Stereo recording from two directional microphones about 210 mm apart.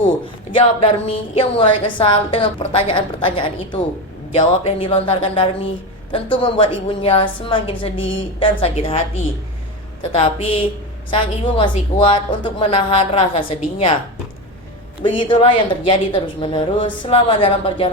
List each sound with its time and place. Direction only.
0.5 s a woman's voice: 25° left (ahead or behind)
10.1 s a woman's voice: 25° left (ahead or behind)
15.0 s a woman's voice: 20° left (ahead or behind)